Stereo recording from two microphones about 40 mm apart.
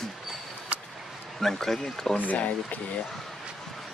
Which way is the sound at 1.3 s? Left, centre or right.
Centre.